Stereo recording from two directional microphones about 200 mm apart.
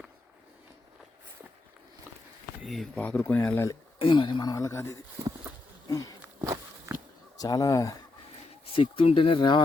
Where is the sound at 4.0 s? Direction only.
25° left (ahead or behind).